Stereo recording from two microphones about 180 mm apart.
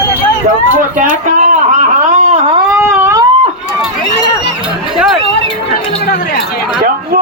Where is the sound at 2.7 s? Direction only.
15° right (ahead or behind).